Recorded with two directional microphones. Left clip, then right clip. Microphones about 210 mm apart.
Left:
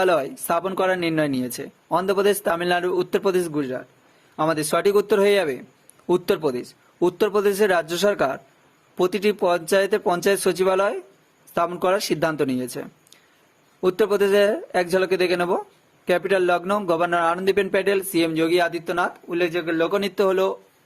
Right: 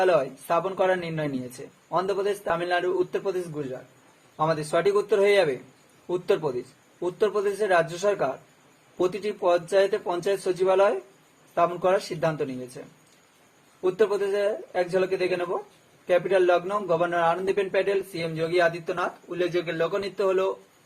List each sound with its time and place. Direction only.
0.0 s speech: 50° left (ahead or behind)
13.8 s speech: 55° left (ahead or behind)